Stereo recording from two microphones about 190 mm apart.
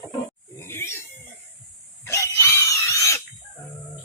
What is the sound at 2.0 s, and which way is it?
Pig, 15° left (ahead or behind).